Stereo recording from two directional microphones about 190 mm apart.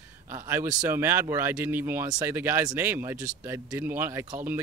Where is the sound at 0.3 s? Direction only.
15° right (ahead or behind).